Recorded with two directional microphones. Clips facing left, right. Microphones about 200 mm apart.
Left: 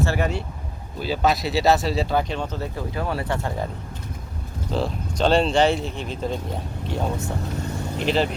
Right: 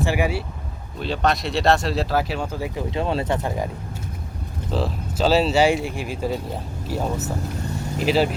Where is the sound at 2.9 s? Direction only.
25° right (ahead or behind).